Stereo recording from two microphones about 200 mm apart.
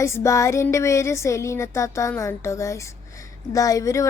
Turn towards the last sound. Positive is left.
turn(degrees=15)  # may be behind; listen again after turning